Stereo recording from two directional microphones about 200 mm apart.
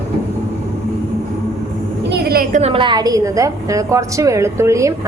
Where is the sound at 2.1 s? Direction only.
50° right (ahead or behind).